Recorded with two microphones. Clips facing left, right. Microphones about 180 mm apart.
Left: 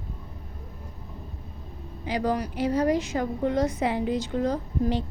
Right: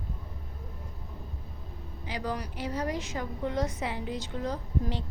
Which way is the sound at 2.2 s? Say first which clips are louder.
Left 8 dB; 60° left (ahead or behind).